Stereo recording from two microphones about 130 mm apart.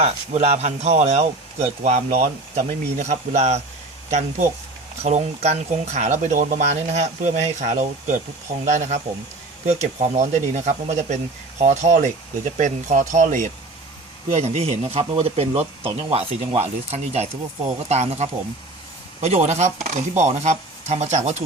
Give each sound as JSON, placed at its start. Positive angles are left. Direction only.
{"t": 0.0, "sound": "speech", "side_deg": -55}
{"t": 14.3, "sound": "speech", "side_deg": -60}